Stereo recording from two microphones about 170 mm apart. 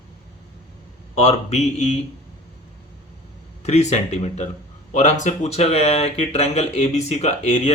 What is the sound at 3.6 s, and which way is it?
Speech, 40° left (ahead or behind).